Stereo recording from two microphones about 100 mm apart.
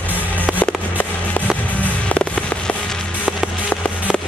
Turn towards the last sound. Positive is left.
turn(degrees=15)  # may be behind; listen again after turning